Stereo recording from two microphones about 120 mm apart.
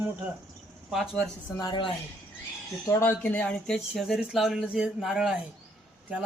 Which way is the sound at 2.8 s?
20° left (ahead or behind).